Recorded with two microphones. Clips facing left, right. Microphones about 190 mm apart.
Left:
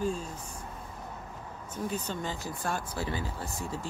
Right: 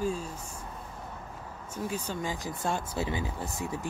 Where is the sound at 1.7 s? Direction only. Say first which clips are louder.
Even; 10° right (ahead or behind).